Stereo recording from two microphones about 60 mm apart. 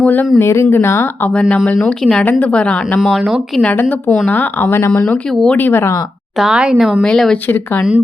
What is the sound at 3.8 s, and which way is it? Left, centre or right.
A woman's voice, left.